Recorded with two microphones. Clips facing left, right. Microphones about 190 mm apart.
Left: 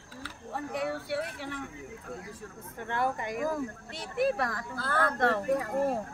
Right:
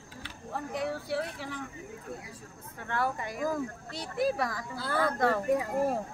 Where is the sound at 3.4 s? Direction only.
5° left (ahead or behind).